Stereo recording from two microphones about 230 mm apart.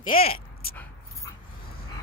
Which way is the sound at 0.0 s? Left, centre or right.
Left.